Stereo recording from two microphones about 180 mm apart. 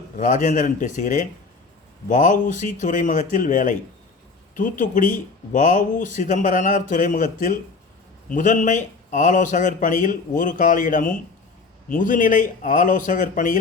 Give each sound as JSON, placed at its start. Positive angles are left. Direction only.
{"t": 0.2, "sound": "speech", "side_deg": 45}